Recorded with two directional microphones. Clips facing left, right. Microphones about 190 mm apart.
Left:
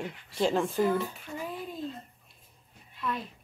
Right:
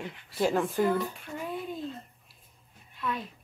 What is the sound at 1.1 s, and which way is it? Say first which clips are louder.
Child singing: right 2 dB; centre (ahead or behind).